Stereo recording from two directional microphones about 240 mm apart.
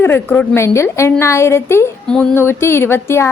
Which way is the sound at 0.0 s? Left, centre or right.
Centre.